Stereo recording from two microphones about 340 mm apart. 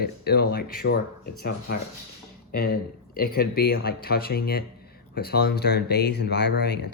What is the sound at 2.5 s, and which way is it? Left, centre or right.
Speech, left.